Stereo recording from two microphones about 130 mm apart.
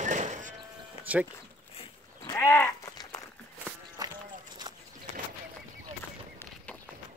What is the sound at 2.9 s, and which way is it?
Sheep, 30° left (ahead or behind).